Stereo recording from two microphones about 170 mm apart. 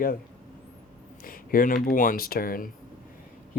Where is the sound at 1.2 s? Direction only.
55° left (ahead or behind).